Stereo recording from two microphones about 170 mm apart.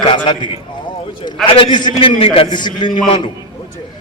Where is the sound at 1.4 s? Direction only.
30° left (ahead or behind).